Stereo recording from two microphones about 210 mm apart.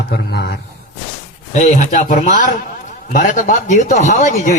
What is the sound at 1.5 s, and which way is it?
Speech, 35° left (ahead or behind).